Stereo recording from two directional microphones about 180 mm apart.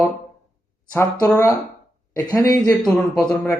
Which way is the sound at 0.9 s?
15° left (ahead or behind).